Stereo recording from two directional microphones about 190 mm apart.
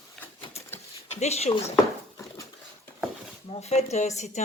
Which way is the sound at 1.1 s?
35° left (ahead or behind).